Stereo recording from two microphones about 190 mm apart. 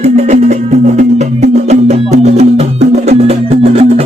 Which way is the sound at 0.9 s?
35° right (ahead or behind).